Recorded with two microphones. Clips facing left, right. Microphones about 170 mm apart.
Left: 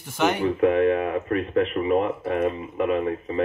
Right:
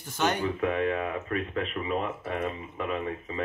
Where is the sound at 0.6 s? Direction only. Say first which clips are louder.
Left 9 dB; 40° left (ahead or behind).